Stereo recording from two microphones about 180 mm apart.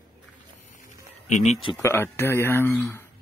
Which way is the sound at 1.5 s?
30° left (ahead or behind).